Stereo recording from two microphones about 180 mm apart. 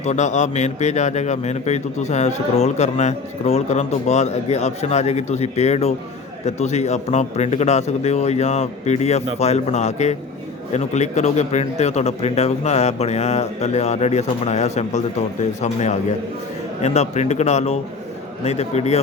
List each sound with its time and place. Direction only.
0.0 s a man's voice: 40° left (ahead or behind)